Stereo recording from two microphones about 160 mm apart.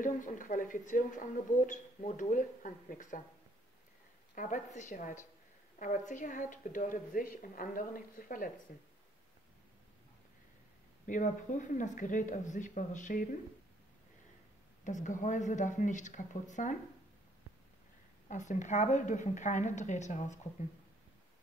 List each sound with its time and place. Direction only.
0.0 s a woman's voice: 55° left (ahead or behind)
4.4 s a woman's voice: 50° left (ahead or behind)
11.1 s speech: 55° left (ahead or behind)
14.9 s speech: 50° left (ahead or behind)
18.3 s speech: 50° left (ahead or behind)